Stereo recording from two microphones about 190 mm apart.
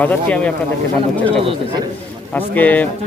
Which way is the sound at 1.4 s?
30° right (ahead or behind).